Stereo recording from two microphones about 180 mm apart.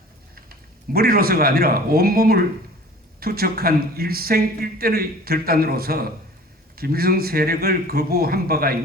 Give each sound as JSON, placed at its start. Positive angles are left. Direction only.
{"t": 0.9, "sound": "a man's voice", "side_deg": -55}